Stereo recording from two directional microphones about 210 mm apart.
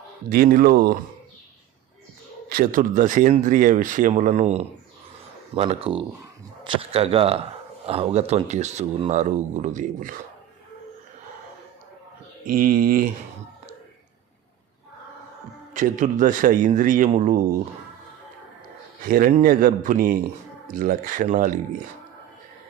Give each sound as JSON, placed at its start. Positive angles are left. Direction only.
{"t": 0.3, "sound": "speech", "side_deg": -45}
{"t": 2.5, "sound": "speech", "side_deg": -40}
{"t": 12.5, "sound": "speech", "side_deg": -40}
{"t": 15.7, "sound": "speech", "side_deg": -40}
{"t": 19.0, "sound": "speech", "side_deg": -45}